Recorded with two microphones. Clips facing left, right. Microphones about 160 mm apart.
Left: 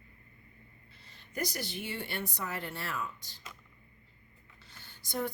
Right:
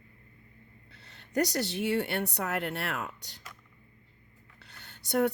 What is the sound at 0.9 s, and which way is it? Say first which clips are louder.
A woman's voice: right 10 dB; 70° right (ahead or behind).